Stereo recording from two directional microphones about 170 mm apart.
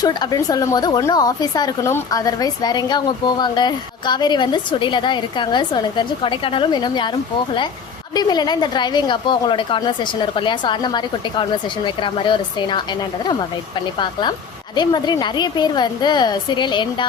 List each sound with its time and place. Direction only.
0.0 s speech: 25° left (ahead or behind)
8.1 s speech: 25° left (ahead or behind)
14.0 s speech: 25° left (ahead or behind)